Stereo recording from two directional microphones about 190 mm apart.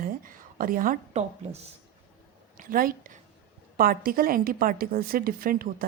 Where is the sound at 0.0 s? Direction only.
45° right (ahead or behind).